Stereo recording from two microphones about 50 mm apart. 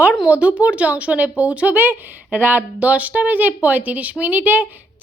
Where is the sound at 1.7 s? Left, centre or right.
Right.